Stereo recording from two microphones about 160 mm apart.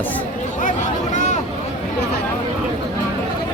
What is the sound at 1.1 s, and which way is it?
Vehicle, 50° left (ahead or behind).